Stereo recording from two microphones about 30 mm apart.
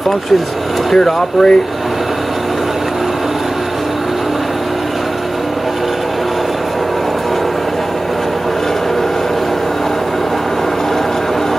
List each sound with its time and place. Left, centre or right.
0.9 s speech: left